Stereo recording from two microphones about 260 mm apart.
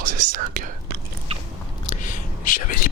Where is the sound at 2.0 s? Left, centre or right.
Left.